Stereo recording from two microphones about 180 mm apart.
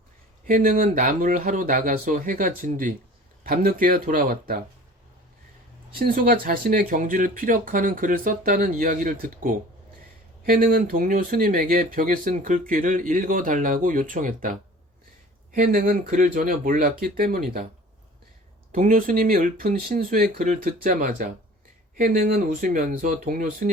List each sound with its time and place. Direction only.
0.4 s speech: 50° right (ahead or behind)
6.0 s speech: 55° right (ahead or behind)
15.5 s speech: 50° right (ahead or behind)
18.7 s speech: 50° right (ahead or behind)